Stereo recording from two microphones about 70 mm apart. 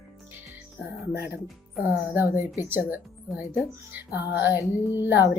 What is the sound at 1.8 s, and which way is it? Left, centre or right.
Music, right.